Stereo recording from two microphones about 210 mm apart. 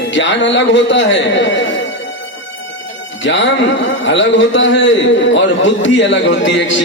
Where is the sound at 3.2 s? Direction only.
60° left (ahead or behind).